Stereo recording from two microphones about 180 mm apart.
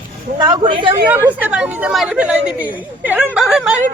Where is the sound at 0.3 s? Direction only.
25° right (ahead or behind).